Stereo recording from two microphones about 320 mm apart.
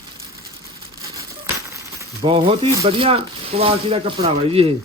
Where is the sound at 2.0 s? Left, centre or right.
Centre.